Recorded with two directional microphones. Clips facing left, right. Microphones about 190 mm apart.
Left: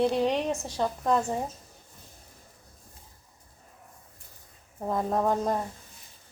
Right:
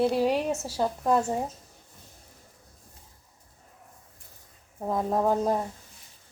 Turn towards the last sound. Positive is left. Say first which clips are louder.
# right 2 dB
turn(degrees=-5)  # may be behind; listen again after turning